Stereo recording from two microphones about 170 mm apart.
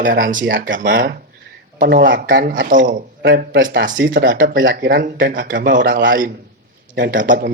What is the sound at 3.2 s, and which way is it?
Speech, 60° right (ahead or behind).